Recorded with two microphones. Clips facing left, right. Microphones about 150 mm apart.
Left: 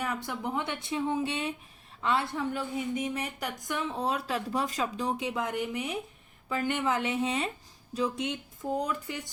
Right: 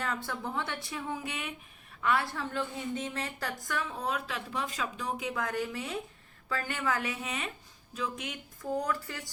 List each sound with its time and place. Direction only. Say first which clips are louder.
0.0 s a woman's voice: left 2 dB; 15° left (ahead or behind)